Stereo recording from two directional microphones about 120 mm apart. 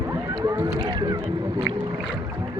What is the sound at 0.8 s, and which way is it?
Boat, 35° right (ahead or behind).